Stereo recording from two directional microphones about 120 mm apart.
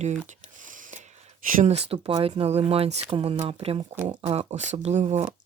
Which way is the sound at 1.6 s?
60° right (ahead or behind).